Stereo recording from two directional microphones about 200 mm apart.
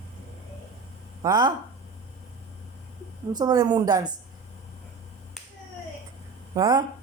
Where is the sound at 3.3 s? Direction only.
20° right (ahead or behind).